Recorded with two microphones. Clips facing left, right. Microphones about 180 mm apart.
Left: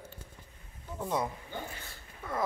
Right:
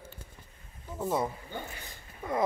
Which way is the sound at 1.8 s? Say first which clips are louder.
Right 4 dB; 15° right (ahead or behind).